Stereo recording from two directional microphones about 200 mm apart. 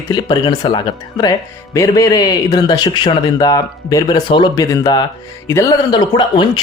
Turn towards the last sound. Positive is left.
turn(degrees=20)  # may be behind; listen again after turning